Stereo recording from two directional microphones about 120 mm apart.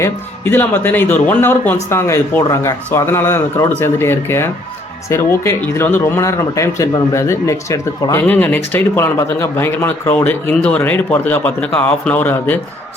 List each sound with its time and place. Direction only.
0.0 s speech: 15° left (ahead or behind)
5.6 s speech: 15° left (ahead or behind)
8.3 s speech: 15° left (ahead or behind)